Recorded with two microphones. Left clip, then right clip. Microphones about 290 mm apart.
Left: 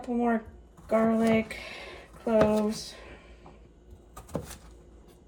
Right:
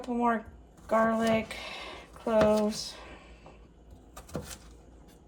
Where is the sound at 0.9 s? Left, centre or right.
Centre.